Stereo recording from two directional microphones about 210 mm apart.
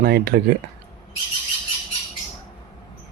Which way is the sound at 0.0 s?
50° right (ahead or behind).